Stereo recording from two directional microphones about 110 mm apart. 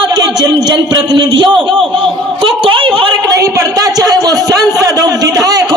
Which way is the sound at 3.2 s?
30° right (ahead or behind).